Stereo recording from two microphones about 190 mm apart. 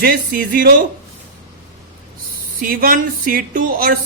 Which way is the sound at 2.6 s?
50° right (ahead or behind).